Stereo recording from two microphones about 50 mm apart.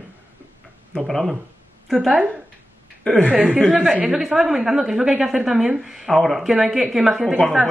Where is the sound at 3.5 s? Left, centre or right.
Centre.